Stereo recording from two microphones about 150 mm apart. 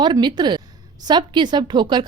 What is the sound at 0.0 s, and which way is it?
A woman's voice, 30° right (ahead or behind).